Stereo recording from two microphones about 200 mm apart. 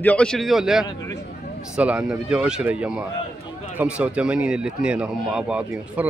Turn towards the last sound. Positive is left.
turn(degrees=-10)  # may be behind; listen again after turning